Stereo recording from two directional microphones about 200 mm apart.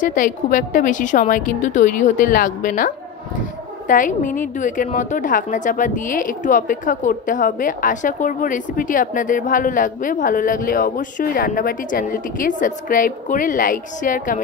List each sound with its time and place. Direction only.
0.0 s a woman's voice: 40° left (ahead or behind)